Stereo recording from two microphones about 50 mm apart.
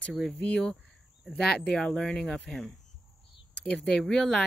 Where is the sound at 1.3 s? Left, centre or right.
Centre.